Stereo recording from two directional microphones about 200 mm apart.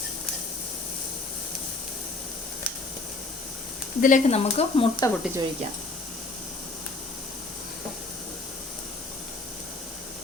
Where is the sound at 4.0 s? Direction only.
35° left (ahead or behind).